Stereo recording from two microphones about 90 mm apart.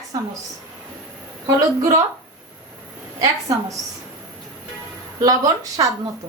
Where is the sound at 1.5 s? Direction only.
40° right (ahead or behind).